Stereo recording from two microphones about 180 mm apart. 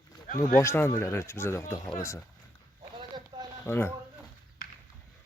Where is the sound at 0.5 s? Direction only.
15° left (ahead or behind).